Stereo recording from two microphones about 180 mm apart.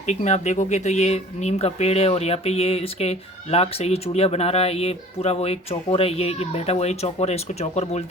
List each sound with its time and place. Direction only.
0.0 s speech: 40° left (ahead or behind)